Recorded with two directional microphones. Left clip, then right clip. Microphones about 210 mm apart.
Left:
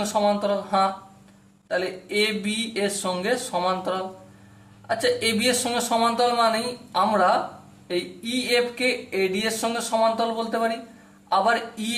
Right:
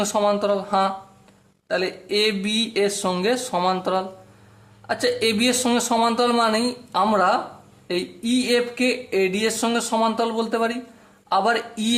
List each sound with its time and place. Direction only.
0.0 s speech: 45° right (ahead or behind)